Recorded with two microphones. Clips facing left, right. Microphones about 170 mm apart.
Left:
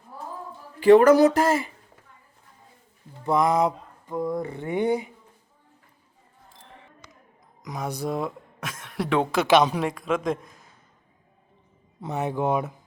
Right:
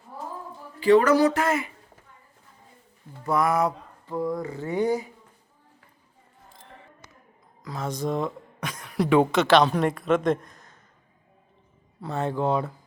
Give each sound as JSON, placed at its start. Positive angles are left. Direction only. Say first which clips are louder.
{"t": 0.8, "sound": "speech", "louder": "left 4 dB", "side_deg": 50}
{"t": 3.2, "sound": "speech", "louder": "left 2 dB", "side_deg": 20}
{"t": 7.6, "sound": "speech", "louder": "even", "side_deg": 15}
{"t": 11.9, "sound": "speech", "louder": "even", "side_deg": 20}